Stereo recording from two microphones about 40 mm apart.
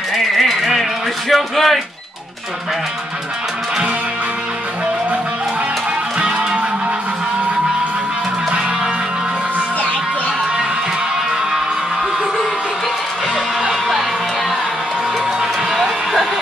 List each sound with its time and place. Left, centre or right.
0.1 s a sound: centre
1.3 s a man's voice: centre
6.1 s music: right
15.7 s music: centre